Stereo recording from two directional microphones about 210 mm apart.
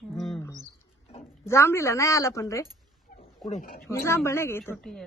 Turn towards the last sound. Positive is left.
turn(degrees=0)  # may be behind; listen again after turning